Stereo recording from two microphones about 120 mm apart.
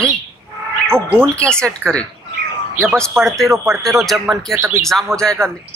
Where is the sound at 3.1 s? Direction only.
Centre (ahead or behind).